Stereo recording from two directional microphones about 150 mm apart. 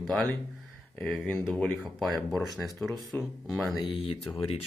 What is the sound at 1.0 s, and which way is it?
Speech, 10° left (ahead or behind).